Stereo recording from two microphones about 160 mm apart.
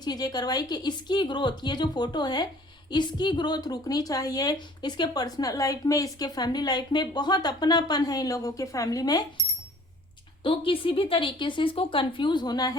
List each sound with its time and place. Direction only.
0.0 s a woman's voice: 25° left (ahead or behind)
10.4 s speech: 35° left (ahead or behind)